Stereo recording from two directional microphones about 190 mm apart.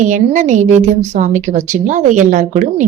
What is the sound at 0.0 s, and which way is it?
A woman's voice, 40° right (ahead or behind).